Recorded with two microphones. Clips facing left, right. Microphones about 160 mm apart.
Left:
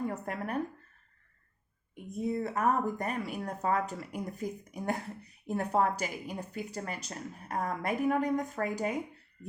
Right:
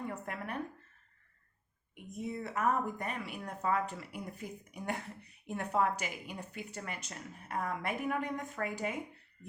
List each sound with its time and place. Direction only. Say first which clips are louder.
0.1 s speech: left 5 dB; 40° left (ahead or behind)
2.0 s speech: left 7 dB; 35° left (ahead or behind)